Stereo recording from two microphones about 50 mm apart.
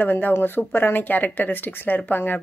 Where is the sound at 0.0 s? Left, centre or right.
Left.